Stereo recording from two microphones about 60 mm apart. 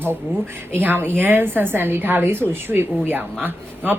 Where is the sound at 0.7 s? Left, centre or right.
Right.